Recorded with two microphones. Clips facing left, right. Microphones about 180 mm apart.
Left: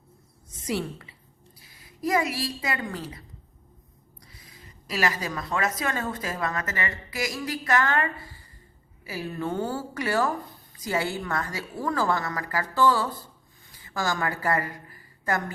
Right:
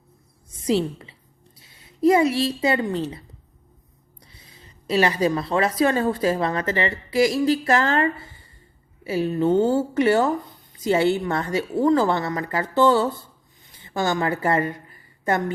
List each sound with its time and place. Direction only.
0.7 s a woman's voice: 25° right (ahead or behind)